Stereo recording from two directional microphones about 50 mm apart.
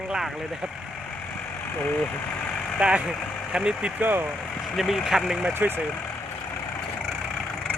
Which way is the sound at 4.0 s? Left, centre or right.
Right.